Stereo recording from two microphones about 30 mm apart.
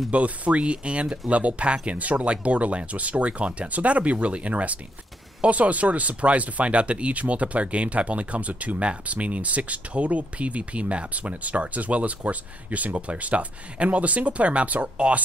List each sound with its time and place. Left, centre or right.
0.1 s speech: right
2.2 s speech: right